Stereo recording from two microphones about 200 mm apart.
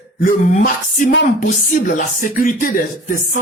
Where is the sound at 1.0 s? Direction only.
40° left (ahead or behind).